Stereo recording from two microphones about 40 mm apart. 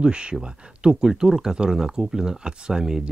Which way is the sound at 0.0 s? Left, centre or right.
Right.